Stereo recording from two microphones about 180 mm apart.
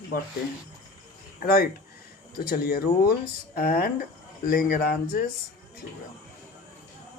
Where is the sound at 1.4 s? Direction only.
55° left (ahead or behind).